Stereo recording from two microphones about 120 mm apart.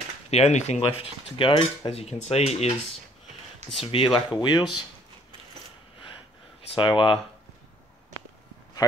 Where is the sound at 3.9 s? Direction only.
50° left (ahead or behind).